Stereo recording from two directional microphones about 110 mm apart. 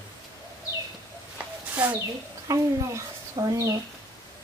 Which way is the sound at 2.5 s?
30° right (ahead or behind).